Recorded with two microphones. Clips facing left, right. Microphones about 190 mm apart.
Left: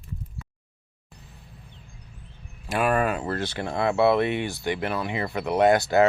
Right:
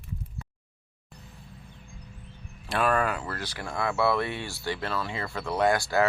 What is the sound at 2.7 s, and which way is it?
Speech, 15° left (ahead or behind).